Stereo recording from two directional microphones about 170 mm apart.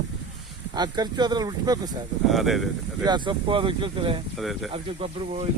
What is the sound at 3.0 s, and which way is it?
Speech, 25° right (ahead or behind).